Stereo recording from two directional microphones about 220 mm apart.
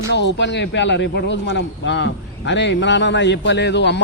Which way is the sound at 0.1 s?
50° left (ahead or behind).